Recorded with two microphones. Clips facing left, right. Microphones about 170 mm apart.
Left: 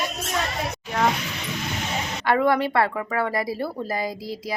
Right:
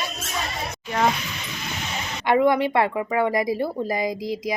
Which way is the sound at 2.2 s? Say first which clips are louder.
Right 2 dB; 15° right (ahead or behind).